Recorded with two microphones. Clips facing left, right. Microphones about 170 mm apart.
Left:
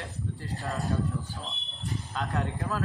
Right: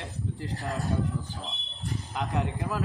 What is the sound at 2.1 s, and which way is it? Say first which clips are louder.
Speech: right 2 dB; 15° right (ahead or behind).